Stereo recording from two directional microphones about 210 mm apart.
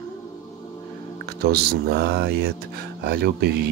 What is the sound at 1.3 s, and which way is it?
Speech, 50° right (ahead or behind).